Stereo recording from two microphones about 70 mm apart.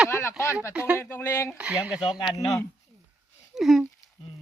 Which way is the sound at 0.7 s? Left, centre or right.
Centre.